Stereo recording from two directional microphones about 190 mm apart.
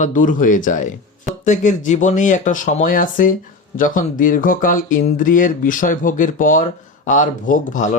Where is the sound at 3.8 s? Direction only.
45° left (ahead or behind).